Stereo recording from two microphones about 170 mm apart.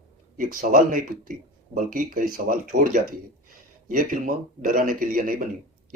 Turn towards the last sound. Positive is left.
turn(degrees=-55)  # may be behind; listen again after turning